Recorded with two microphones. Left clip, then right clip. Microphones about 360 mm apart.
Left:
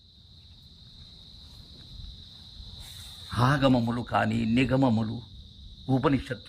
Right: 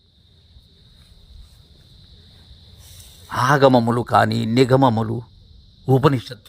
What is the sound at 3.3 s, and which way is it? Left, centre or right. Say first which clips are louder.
A man's voice: right 10 dB; centre.